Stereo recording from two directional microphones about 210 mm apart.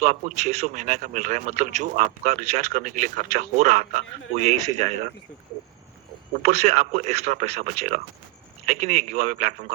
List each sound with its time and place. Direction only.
0.0 s a man's voice: 35° right (ahead or behind)
6.4 s a man's voice: 30° right (ahead or behind)